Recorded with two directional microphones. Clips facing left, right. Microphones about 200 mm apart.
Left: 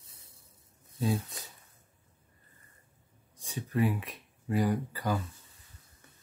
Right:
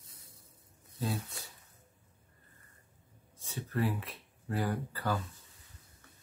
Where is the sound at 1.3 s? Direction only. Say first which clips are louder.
Left 1 dB; 20° left (ahead or behind).